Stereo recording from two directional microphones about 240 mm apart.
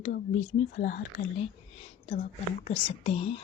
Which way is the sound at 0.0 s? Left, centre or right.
Left.